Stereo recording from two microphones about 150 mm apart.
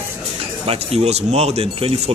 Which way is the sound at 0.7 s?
45° right (ahead or behind).